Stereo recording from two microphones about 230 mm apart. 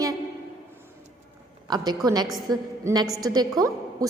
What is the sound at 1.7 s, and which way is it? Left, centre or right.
A woman's voice, centre.